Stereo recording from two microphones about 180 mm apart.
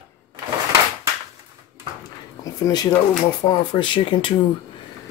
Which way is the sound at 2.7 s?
20° left (ahead or behind).